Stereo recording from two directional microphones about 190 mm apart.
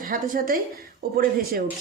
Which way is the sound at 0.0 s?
45° right (ahead or behind).